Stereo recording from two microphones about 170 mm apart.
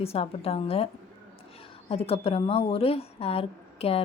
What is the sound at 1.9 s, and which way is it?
A woman's voice, 35° left (ahead or behind).